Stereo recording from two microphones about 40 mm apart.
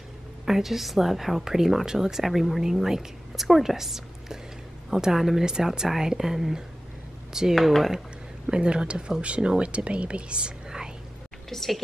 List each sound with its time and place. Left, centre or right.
0.5 s a woman's voice: centre
2.2 s a woman's voice: centre; by 10.5 s right
11.4 s a woman's voice: centre